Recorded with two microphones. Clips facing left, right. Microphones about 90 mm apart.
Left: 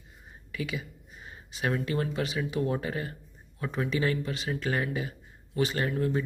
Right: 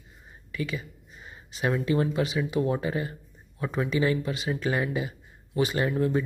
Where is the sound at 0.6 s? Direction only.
5° left (ahead or behind).